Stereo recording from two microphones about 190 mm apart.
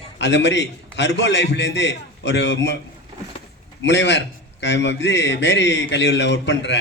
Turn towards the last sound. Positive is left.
turn(degrees=65)  # may be behind; listen again after turning